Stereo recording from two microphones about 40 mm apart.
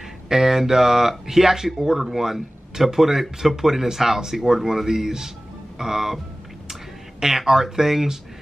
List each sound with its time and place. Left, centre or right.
0.3 s speech: centre